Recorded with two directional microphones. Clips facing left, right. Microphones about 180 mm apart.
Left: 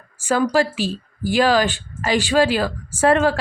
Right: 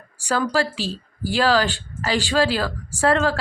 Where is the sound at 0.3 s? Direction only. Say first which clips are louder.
Left 4 dB; 20° left (ahead or behind).